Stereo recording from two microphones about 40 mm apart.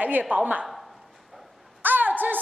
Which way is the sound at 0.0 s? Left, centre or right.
Right.